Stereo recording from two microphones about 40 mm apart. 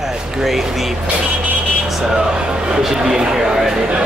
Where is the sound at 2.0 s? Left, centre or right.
Centre.